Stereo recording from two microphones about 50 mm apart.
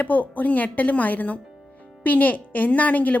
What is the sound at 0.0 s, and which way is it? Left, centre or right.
A woman's voice, left.